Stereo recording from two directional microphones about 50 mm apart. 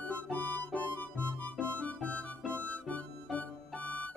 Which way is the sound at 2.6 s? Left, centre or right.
Left.